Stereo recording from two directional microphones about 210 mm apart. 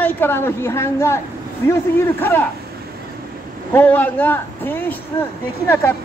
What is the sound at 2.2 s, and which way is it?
Speech, 10° left (ahead or behind).